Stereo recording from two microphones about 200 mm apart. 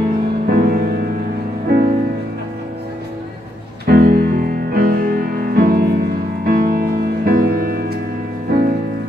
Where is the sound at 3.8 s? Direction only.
50° right (ahead or behind).